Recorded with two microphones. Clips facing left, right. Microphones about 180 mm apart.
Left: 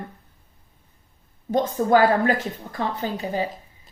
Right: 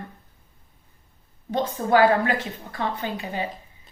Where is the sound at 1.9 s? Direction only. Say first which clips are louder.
Even; 40° left (ahead or behind).